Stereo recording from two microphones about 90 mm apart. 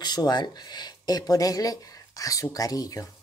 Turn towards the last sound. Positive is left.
turn(degrees=40)  # may be behind; listen again after turning